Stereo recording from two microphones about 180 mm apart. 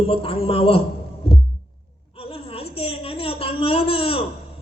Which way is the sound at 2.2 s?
30° left (ahead or behind).